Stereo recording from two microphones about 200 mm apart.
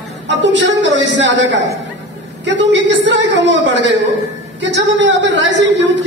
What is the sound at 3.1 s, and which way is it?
A man's voice, 65° right (ahead or behind).